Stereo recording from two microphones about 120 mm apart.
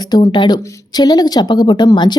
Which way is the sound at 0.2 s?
40° left (ahead or behind).